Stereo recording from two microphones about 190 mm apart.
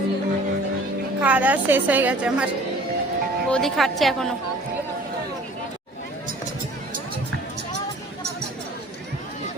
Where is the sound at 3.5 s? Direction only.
Centre (ahead or behind).